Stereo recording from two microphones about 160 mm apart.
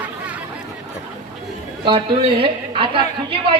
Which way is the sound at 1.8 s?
30° right (ahead or behind).